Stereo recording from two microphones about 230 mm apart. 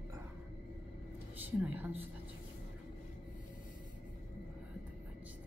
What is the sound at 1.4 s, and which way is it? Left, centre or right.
Speech, centre.